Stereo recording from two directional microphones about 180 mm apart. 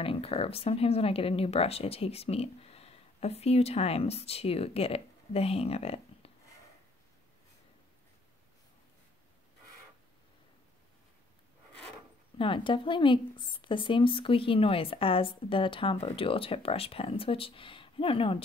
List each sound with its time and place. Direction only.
0.0 s speech: 30° left (ahead or behind)
12.4 s speech: 30° left (ahead or behind)